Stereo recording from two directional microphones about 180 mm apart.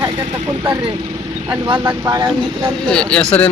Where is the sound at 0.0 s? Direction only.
15° right (ahead or behind).